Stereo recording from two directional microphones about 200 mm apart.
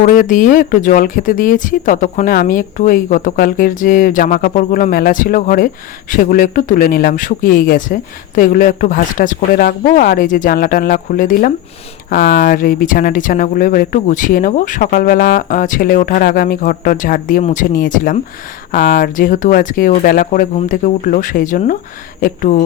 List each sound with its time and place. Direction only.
0.0 s speech: 40° left (ahead or behind)